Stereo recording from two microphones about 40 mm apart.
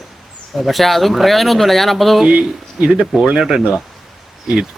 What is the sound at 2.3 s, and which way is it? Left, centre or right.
Speech, right.